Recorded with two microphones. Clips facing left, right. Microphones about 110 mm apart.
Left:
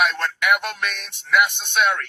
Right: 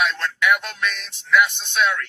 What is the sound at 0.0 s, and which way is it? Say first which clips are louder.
Speech: even; 55° left (ahead or behind).